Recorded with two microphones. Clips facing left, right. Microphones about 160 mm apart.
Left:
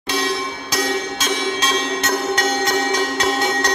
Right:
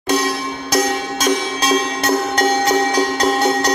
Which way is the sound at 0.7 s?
40° right (ahead or behind).